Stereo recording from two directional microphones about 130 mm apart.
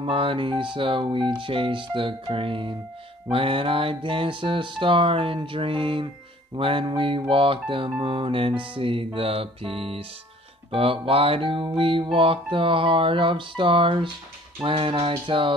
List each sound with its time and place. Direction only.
0.0 s speech: 45° right (ahead or behind)
3.3 s music: 45° right (ahead or behind)
6.5 s speech: 40° right (ahead or behind)
8.0 s music: 40° right (ahead or behind)